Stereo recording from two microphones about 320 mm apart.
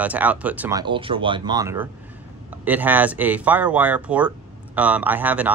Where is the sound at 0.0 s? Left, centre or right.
Centre.